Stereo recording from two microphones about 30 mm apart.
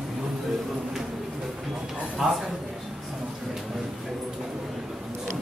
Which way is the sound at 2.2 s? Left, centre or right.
Centre.